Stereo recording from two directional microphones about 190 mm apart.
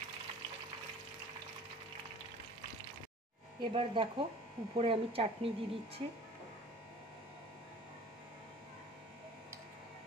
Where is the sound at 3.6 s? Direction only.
25° right (ahead or behind).